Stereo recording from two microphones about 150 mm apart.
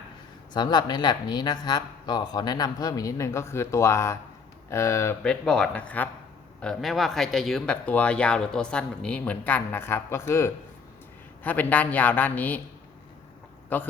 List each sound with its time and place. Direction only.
0.5 s speech: 30° left (ahead or behind)
5.2 s speech: 5° left (ahead or behind)
13.7 s speech: 10° left (ahead or behind)